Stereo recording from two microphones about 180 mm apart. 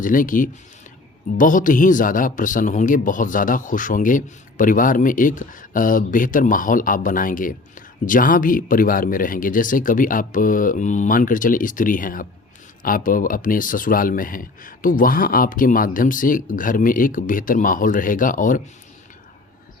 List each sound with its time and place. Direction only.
0.0 s speech: 50° left (ahead or behind)